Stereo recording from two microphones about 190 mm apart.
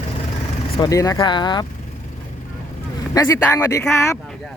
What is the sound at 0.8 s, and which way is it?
Speech, 20° left (ahead or behind).